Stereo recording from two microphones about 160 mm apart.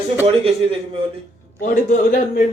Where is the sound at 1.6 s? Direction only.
60° left (ahead or behind).